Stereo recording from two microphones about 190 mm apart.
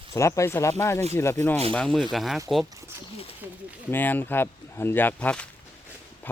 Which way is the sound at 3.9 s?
10° left (ahead or behind).